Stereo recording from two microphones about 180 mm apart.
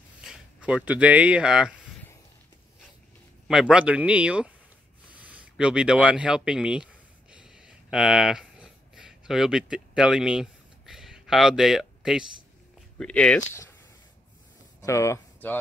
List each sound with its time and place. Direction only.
0.2 s speech: 5° right (ahead or behind)
3.4 s a man's voice: 5° right (ahead or behind)
5.2 s a sound: 5° right (ahead or behind)
12.9 s speech: 5° left (ahead or behind)
14.8 s speech: 15° left (ahead or behind)